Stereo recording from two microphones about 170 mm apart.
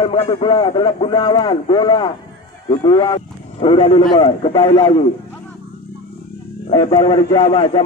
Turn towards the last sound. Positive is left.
turn(degrees=30)  # may be behind; listen again after turning